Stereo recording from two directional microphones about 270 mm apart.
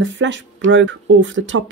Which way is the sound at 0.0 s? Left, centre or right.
Right.